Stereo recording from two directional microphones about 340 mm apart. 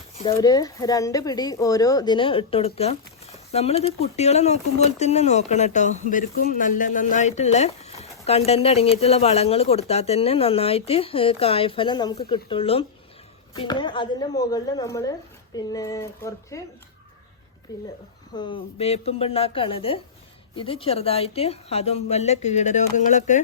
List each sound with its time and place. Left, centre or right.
0.2 s speech: centre
17.7 s speech: centre